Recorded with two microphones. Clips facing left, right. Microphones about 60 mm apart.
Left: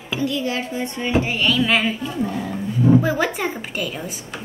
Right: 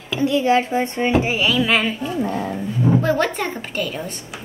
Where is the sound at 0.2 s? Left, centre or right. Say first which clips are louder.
Right 7 dB; right.